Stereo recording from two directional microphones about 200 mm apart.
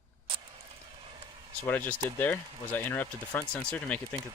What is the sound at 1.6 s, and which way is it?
Speech, 10° left (ahead or behind).